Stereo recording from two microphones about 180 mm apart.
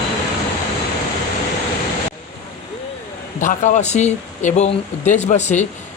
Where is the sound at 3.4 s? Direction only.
45° left (ahead or behind).